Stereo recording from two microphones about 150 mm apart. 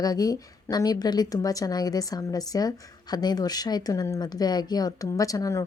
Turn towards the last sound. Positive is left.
turn(degrees=20)  # may be behind; listen again after turning